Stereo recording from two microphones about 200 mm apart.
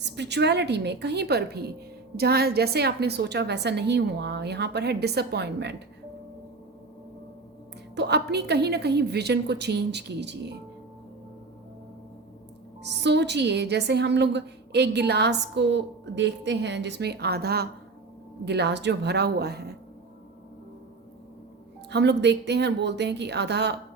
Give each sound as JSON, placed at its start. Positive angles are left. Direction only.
{"t": 0.0, "sound": "a woman's voice", "side_deg": -60}
{"t": 7.9, "sound": "a woman's voice", "side_deg": -55}
{"t": 12.8, "sound": "a woman's voice", "side_deg": -60}
{"t": 21.8, "sound": "a woman's voice", "side_deg": -60}